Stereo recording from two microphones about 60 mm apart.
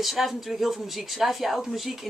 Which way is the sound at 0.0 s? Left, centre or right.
Centre.